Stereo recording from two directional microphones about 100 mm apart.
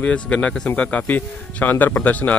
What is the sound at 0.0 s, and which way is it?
Speech, 10° left (ahead or behind).